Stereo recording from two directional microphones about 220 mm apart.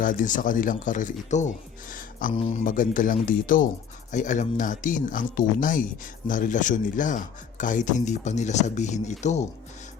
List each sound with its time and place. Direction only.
0.0 s speech: 40° left (ahead or behind)